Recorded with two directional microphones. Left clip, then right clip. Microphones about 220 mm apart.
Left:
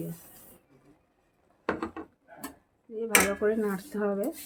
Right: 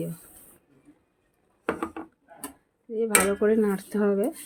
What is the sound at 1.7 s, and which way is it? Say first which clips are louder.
Wood: right 2 dB; 20° right (ahead or behind).